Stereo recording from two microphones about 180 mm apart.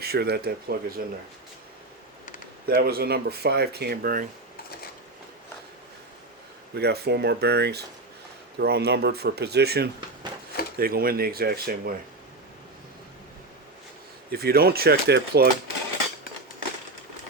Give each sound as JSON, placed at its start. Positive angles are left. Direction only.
{"t": 0.0, "sound": "speech", "side_deg": -60}
{"t": 2.6, "sound": "speech", "side_deg": -60}
{"t": 6.7, "sound": "speech", "side_deg": -65}
{"t": 14.3, "sound": "speech", "side_deg": -55}